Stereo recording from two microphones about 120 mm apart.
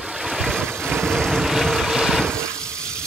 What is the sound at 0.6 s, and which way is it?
Vehicle, 15° right (ahead or behind).